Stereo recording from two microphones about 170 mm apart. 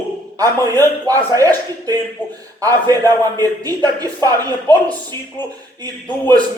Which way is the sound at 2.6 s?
20° right (ahead or behind).